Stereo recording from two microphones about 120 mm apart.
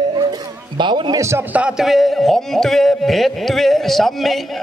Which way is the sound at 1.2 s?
20° right (ahead or behind).